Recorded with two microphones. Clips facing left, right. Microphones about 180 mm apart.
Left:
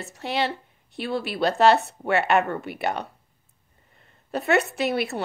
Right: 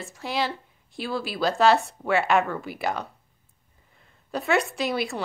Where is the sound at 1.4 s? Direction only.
Centre (ahead or behind).